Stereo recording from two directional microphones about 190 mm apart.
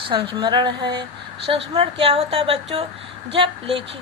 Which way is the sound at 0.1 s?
25° right (ahead or behind).